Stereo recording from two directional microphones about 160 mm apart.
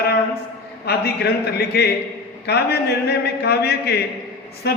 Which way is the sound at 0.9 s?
85° left.